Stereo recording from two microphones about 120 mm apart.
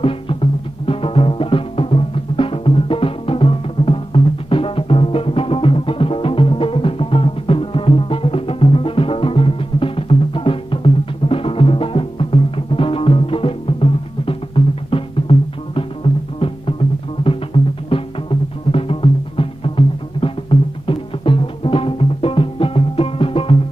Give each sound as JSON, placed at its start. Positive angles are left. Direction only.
{"t": 0.0, "sound": "music", "side_deg": 50}
{"t": 17.8, "sound": "music", "side_deg": 50}